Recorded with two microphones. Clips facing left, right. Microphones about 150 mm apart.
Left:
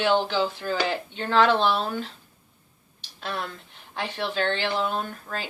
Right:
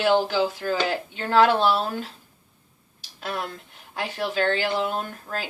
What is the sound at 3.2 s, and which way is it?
Speech, 45° right (ahead or behind).